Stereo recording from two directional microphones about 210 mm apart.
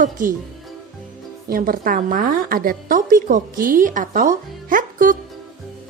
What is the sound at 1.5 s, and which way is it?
A woman's voice, 40° right (ahead or behind).